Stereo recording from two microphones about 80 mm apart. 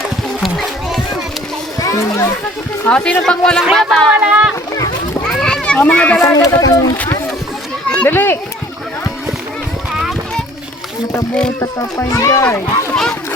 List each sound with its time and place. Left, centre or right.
0.3 s children playing: centre
1.8 s a child's voice: left
2.9 s a man's voice: centre
3.6 s speech: centre
4.1 s speech: centre
5.2 s children playing: centre
6.2 s speech: left
8.0 s speech: left
11.6 s a child's voice: left
12.9 s speech: centre